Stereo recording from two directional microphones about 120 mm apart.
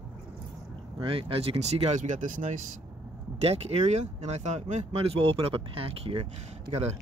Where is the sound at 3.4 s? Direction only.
60° right (ahead or behind); by 4.8 s 75° right (ahead or behind).